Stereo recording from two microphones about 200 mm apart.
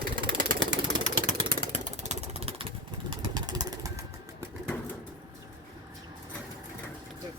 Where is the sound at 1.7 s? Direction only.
35° right (ahead or behind); by 4.5 s 15° right (ahead or behind).